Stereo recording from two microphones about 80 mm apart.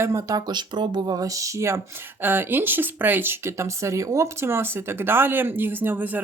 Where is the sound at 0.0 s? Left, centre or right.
Right.